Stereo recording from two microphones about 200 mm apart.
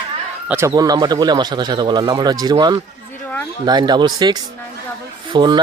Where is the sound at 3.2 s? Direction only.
10° left (ahead or behind).